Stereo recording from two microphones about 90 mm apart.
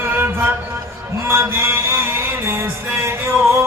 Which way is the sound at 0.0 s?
25° right (ahead or behind).